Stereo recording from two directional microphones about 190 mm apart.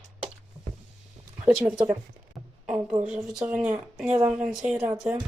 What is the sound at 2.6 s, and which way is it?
Speech, 5° right (ahead or behind).